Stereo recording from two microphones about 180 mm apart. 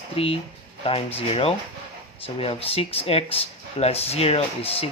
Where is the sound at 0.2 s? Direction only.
30° left (ahead or behind).